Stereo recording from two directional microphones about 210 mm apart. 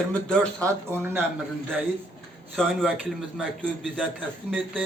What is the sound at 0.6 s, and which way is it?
Speech, 10° right (ahead or behind).